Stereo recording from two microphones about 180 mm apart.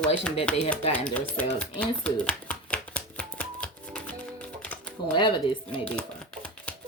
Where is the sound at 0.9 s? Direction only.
10° left (ahead or behind).